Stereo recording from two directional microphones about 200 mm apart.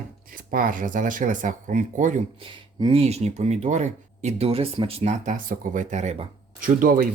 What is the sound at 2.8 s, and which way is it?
Speech, 25° right (ahead or behind).